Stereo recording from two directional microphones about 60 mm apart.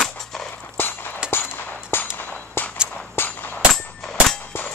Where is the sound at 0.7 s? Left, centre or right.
Left.